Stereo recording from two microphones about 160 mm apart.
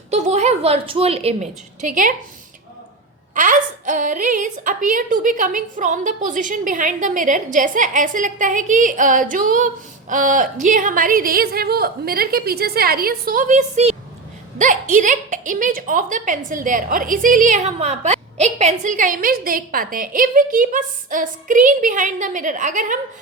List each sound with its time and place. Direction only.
0.1 s a woman's voice: 45° right (ahead or behind)
3.3 s a woman's voice: 55° right (ahead or behind)